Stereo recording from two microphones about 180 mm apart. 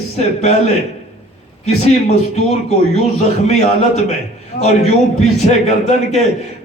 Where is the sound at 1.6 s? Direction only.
40° left (ahead or behind).